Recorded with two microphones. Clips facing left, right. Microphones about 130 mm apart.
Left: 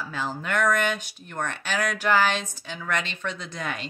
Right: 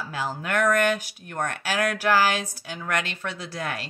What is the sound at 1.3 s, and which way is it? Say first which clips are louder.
Speech: right 2 dB; 40° right (ahead or behind).